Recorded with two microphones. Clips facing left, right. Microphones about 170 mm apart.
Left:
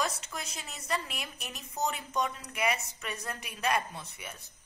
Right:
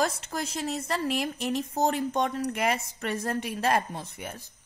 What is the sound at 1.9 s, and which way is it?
Speech, 70° right (ahead or behind).